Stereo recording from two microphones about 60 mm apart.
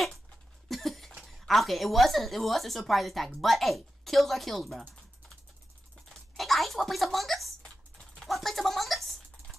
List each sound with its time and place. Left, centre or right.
0.7 s cough: centre
1.4 s speech: centre
6.3 s a sound: centre
8.2 s typing: centre